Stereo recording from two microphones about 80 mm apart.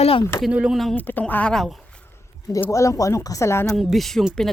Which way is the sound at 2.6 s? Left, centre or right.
Left.